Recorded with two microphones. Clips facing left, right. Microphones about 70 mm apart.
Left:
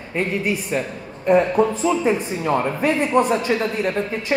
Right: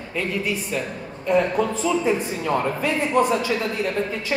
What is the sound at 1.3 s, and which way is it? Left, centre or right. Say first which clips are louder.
Speech: left 4 dB; left.